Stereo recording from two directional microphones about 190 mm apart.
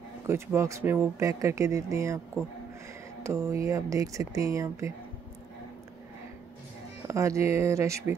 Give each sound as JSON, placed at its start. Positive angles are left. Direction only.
{"t": 0.3, "sound": "speech", "side_deg": -15}
{"t": 3.3, "sound": "speech", "side_deg": -15}
{"t": 7.1, "sound": "speech", "side_deg": -15}